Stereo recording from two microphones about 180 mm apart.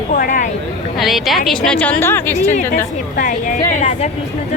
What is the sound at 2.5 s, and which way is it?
Speech, 45° left (ahead or behind).